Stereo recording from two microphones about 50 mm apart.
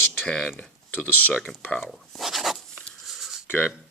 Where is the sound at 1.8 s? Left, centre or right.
Centre.